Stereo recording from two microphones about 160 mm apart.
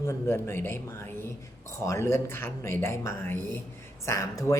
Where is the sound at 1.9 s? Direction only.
15° left (ahead or behind).